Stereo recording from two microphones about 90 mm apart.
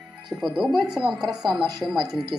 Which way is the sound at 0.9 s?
10° right (ahead or behind).